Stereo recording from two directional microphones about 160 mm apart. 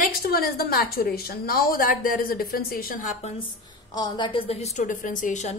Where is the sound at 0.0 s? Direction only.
65° left (ahead or behind); by 3.4 s 40° left (ahead or behind).